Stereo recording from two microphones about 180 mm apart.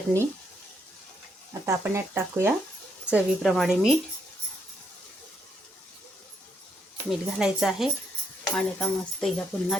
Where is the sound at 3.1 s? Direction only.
Centre (ahead or behind).